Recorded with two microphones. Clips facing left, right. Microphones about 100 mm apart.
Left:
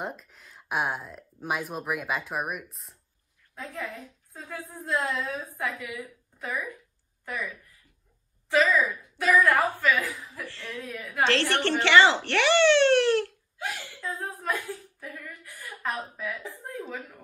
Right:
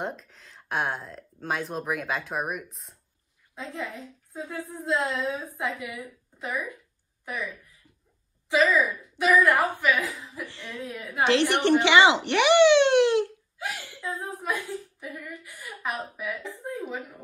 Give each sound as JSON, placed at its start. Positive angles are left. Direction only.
{"t": 0.0, "sound": "speech", "side_deg": 5}
{"t": 3.5, "sound": "a woman's voice", "side_deg": -20}
{"t": 9.2, "sound": "a woman's voice", "side_deg": -15}